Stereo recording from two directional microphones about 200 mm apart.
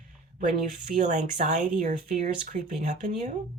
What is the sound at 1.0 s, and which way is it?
Speech, 40° right (ahead or behind).